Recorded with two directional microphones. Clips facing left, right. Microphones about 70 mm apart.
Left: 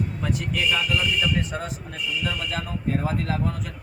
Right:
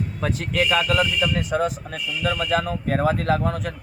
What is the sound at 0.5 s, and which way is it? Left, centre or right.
A man's voice, right.